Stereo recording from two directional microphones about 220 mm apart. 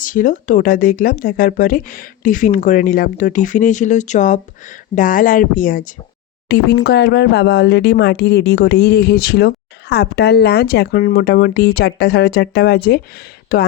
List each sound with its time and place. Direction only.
0.0 s speech: 40° left (ahead or behind)